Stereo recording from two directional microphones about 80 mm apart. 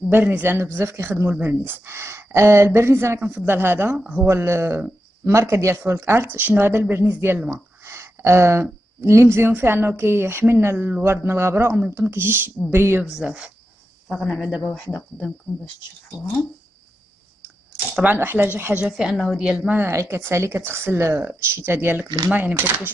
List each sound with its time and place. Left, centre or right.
0.1 s a woman's voice: right
4.3 s speech: right
7.4 s a sound: right
9.0 s speech: right
9.5 s a woman's voice: right
13.2 s speech: centre
14.0 s speech: centre
18.0 s a woman's voice: right
18.9 s speech: centre
19.8 s a woman's voice: right